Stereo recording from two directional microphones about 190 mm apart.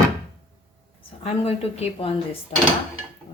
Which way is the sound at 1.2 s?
30° left (ahead or behind).